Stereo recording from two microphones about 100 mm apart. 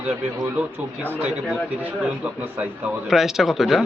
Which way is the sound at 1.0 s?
15° right (ahead or behind).